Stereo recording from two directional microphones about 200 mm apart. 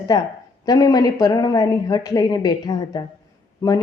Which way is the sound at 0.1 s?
20° left (ahead or behind).